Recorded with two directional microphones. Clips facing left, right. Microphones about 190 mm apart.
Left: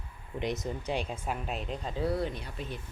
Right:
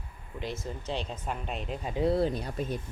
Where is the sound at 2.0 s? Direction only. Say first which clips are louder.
Right 6 dB; 30° right (ahead or behind).